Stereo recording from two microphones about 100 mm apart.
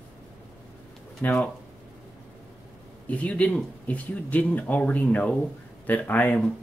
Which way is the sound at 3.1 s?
15° left (ahead or behind).